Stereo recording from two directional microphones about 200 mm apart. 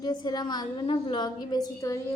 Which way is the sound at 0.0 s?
20° left (ahead or behind).